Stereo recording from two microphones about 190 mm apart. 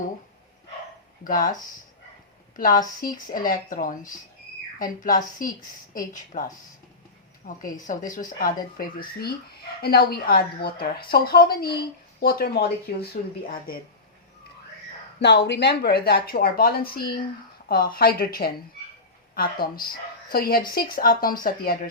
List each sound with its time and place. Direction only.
1.2 s speech: 45° left (ahead or behind)
3.0 s speech: 45° left (ahead or behind)
7.4 s speech: 40° left (ahead or behind)
9.1 s speech: 55° left (ahead or behind)
15.2 s speech: 65° left (ahead or behind)